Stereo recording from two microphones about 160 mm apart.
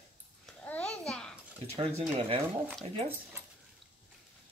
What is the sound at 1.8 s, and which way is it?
Speech, 40° right (ahead or behind).